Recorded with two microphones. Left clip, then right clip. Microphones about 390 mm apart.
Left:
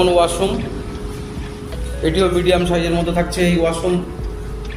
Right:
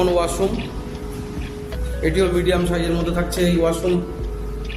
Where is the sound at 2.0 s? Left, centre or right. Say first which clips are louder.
Left 3 dB; right.